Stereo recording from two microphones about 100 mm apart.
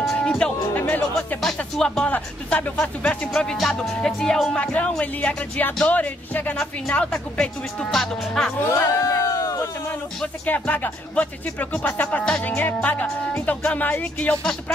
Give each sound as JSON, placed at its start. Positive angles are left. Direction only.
{"t": 0.0, "sound": "music", "side_deg": 0}
{"t": 1.4, "sound": "speech", "side_deg": 5}
{"t": 8.6, "sound": "a sound", "side_deg": 30}
{"t": 10.2, "sound": "speech", "side_deg": 15}